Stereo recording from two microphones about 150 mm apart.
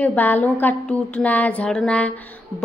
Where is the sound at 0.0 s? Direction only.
10° left (ahead or behind).